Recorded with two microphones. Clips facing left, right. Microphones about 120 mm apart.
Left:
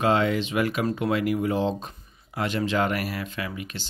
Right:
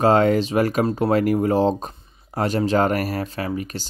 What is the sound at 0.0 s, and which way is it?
Speech, 45° right (ahead or behind).